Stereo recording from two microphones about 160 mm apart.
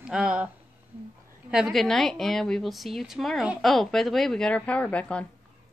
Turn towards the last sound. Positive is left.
turn(degrees=5)  # may be behind; listen again after turning